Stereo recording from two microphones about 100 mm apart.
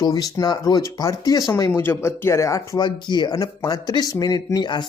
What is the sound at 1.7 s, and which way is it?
Speech, 20° left (ahead or behind).